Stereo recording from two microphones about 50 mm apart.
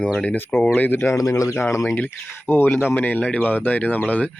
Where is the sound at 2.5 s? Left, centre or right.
Left.